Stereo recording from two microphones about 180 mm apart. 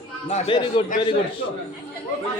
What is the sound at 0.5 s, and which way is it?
Speech, 25° left (ahead or behind).